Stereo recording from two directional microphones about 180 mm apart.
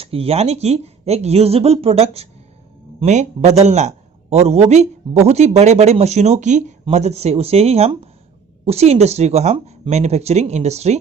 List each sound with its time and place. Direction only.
0.0 s a man's voice: 35° right (ahead or behind)